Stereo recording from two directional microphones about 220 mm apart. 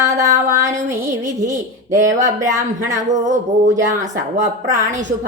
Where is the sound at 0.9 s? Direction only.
10° right (ahead or behind).